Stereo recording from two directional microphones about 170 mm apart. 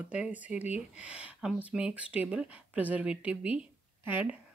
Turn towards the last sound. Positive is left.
turn(degrees=-10)  # may be behind; listen again after turning